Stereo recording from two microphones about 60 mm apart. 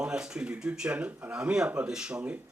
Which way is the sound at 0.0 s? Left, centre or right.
Centre.